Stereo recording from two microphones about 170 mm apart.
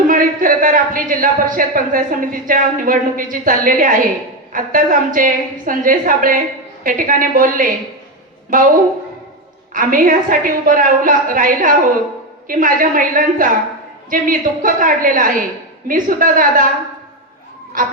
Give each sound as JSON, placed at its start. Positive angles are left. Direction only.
{"t": 0.1, "sound": "a woman's voice", "side_deg": -55}
{"t": 9.7, "sound": "a woman's voice", "side_deg": -55}